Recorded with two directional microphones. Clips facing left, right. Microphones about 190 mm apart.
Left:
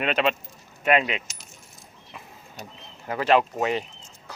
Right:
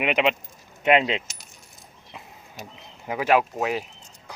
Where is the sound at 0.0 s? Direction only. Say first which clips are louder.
Right 1 dB; 15° right (ahead or behind).